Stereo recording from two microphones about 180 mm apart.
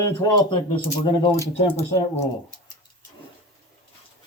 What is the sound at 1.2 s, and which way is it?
Speech, 20° left (ahead or behind).